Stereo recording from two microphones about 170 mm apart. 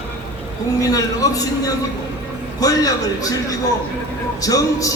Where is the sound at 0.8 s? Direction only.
20° left (ahead or behind).